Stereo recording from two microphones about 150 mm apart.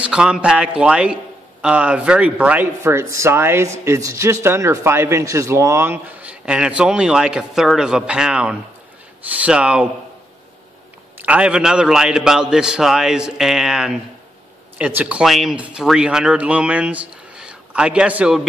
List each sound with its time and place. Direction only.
0.0 s speech: 5° right (ahead or behind)
11.1 s a man's voice: 10° right (ahead or behind)